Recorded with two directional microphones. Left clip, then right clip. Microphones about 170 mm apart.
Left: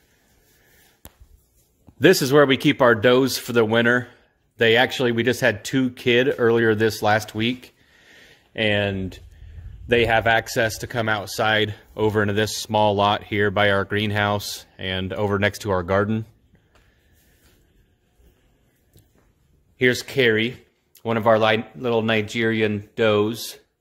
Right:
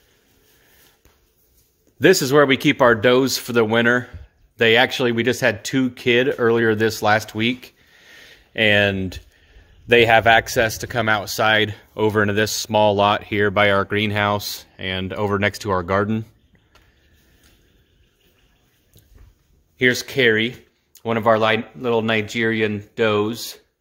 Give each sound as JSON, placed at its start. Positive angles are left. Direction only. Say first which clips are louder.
{"t": 2.0, "sound": "speech", "louder": "right 1 dB", "side_deg": 5}
{"t": 19.8, "sound": "speech", "louder": "right 2 dB", "side_deg": 5}